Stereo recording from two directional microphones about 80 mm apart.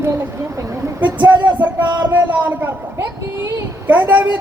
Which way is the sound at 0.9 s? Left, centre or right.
Right.